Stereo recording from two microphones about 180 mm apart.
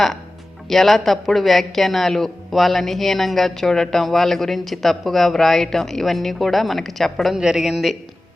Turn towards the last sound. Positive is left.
turn(degrees=0)  # may be behind; listen again after turning